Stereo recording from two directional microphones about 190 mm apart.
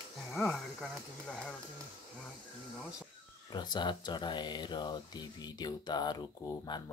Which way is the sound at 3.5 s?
25° left (ahead or behind).